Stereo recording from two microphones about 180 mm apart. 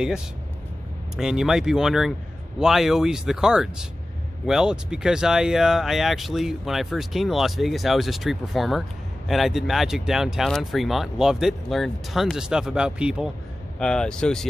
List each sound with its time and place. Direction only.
1.1 s speech: 5° right (ahead or behind)